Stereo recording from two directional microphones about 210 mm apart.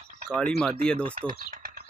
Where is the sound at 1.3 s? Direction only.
40° right (ahead or behind).